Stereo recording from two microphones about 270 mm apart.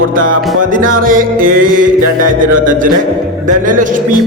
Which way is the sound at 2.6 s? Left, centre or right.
Right.